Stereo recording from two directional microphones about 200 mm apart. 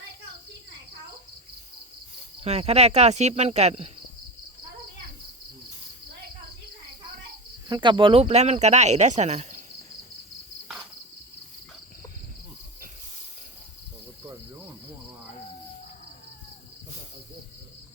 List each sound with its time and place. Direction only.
2.4 s speech: 30° right (ahead or behind)
7.7 s speech: 25° right (ahead or behind)